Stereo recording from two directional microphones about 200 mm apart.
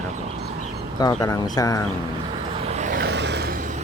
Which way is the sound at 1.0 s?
20° left (ahead or behind).